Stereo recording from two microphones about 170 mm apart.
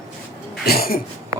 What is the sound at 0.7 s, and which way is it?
Cough, 60° left (ahead or behind).